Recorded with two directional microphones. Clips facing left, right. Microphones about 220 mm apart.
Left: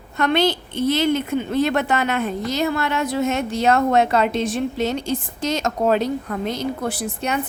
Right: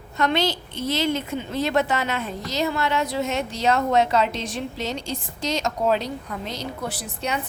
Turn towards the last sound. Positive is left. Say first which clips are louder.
# left 4 dB
turn(degrees=50)  # may be behind; listen again after turning